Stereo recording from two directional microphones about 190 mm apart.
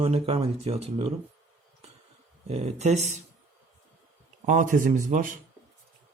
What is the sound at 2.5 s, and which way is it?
Speech, 35° right (ahead or behind).